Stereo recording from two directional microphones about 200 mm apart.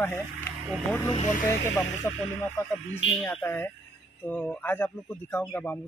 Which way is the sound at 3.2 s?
10° left (ahead or behind).